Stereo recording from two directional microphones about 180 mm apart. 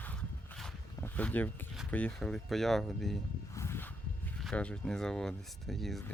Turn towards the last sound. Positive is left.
turn(degrees=0)  # may be behind; listen again after turning